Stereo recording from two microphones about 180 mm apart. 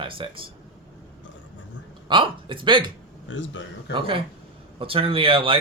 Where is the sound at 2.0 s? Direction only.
30° right (ahead or behind).